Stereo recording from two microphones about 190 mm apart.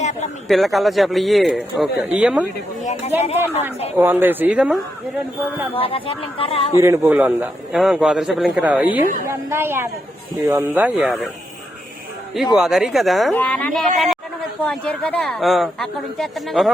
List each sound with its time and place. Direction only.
0.0 s a sound: 40° left (ahead or behind)
0.4 s speech: centre (ahead or behind)
2.8 s speech: 35° left (ahead or behind)
3.9 s a man's voice: 10° right (ahead or behind)
5.7 s speech: 30° left (ahead or behind)
6.7 s a man's voice: 15° right (ahead or behind)
12.5 s speech: centre (ahead or behind)